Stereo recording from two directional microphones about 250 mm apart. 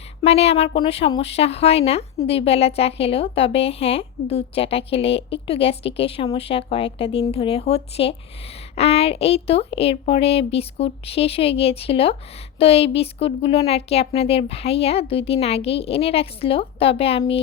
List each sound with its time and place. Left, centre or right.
0.2 s speech: left